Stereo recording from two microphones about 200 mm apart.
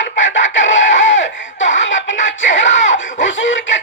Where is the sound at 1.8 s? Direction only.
65° left (ahead or behind).